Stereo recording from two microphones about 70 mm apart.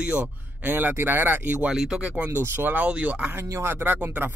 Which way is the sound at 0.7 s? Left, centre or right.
Right.